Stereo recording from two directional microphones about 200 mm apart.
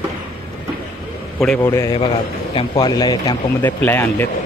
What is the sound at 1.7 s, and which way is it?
Speech, 15° left (ahead or behind).